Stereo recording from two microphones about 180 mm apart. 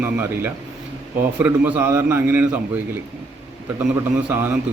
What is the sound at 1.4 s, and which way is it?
A man's voice, 10° right (ahead or behind).